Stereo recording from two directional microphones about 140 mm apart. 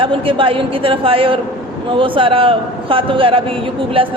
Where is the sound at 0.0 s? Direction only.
40° right (ahead or behind).